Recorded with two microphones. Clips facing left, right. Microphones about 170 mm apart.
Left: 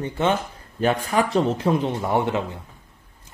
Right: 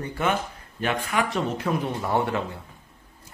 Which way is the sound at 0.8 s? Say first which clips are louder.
Left 5 dB; 35° left (ahead or behind).